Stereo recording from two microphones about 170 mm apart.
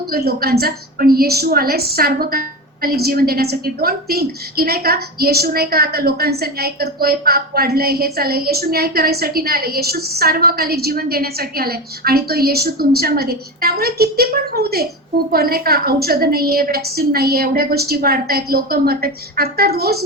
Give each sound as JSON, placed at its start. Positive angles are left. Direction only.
{"t": 0.1, "sound": "a woman's voice", "side_deg": -65}